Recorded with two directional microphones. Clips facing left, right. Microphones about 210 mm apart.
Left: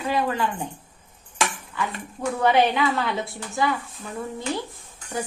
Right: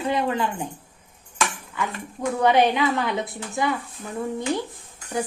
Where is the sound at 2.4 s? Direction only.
15° right (ahead or behind).